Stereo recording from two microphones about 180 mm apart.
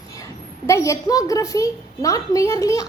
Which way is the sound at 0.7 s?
15° left (ahead or behind).